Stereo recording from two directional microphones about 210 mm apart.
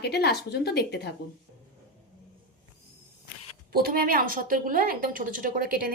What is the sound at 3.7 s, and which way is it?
A woman's voice, 45° right (ahead or behind).